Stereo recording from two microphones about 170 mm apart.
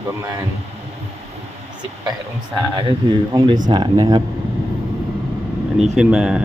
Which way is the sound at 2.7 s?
25° right (ahead or behind).